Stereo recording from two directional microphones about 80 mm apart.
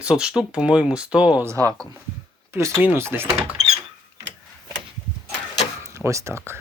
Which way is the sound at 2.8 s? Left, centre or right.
Right.